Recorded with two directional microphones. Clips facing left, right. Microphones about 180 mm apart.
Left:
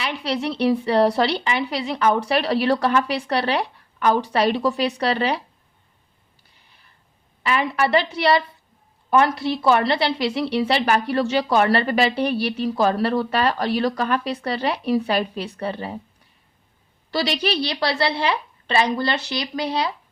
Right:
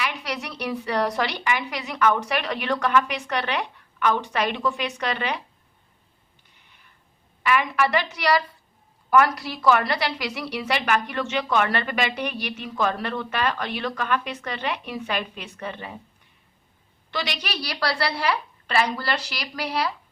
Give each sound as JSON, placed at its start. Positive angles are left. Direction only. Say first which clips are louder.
{"t": 0.0, "sound": "a woman's voice", "louder": "left 5 dB", "side_deg": 30}
{"t": 7.4, "sound": "a woman's voice", "louder": "left 1 dB", "side_deg": 30}
{"t": 17.1, "sound": "a woman's voice", "louder": "left 8 dB", "side_deg": 35}